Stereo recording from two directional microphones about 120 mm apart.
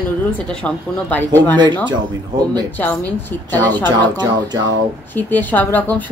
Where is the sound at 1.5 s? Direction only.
35° right (ahead or behind).